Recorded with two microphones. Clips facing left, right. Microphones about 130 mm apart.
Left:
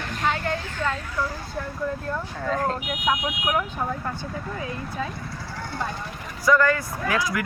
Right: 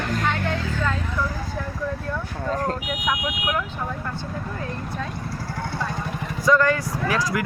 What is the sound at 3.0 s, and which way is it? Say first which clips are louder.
Speech: left 2 dB; 25° left (ahead or behind).